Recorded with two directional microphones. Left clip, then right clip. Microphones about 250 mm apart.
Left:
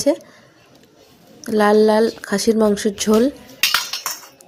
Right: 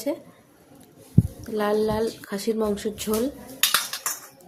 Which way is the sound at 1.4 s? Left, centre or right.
Right.